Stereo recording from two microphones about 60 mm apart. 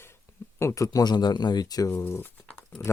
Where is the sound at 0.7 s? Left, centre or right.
Left.